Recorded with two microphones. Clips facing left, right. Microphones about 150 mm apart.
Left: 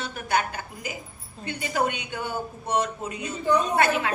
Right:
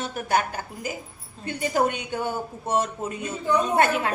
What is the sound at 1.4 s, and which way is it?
A woman's voice, 45° right (ahead or behind).